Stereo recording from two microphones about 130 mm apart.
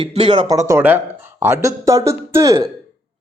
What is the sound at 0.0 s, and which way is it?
Speech, 40° right (ahead or behind).